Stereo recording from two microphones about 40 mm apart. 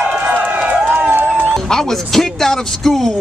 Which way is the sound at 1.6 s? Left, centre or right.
Centre.